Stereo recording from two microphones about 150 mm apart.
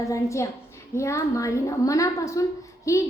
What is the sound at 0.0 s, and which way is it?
A woman's voice, 20° left (ahead or behind).